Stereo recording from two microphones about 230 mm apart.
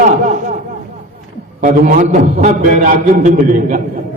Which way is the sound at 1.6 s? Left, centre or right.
Right.